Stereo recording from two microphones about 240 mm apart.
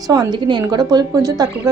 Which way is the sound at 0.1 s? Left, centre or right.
Centre.